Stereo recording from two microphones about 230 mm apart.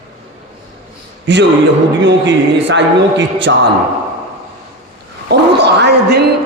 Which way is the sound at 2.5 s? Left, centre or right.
Right.